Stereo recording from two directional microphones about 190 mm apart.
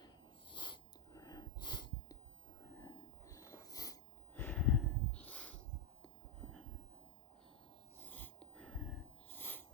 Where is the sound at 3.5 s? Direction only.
20° left (ahead or behind).